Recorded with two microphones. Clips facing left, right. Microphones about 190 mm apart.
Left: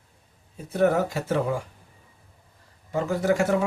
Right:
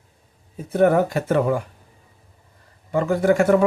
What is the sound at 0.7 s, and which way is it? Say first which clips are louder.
Speech: right 5 dB; 55° right (ahead or behind).